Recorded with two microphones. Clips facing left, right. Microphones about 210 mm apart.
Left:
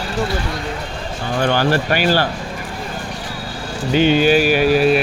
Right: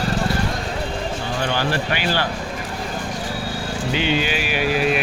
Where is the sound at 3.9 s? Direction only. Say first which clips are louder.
Left 10 dB; 45° left (ahead or behind).